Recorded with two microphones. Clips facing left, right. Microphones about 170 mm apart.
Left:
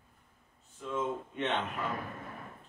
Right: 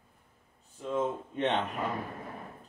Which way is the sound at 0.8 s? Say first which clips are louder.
Right 3 dB; 35° right (ahead or behind).